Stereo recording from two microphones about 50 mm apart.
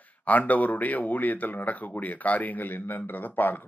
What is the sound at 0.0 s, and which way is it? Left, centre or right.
Speech, left.